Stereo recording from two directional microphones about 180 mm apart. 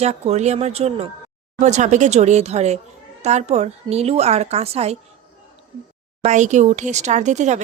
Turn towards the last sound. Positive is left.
turn(degrees=-40)  # may be behind; listen again after turning